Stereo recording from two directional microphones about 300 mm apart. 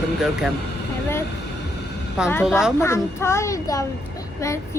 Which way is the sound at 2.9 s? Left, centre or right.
Centre.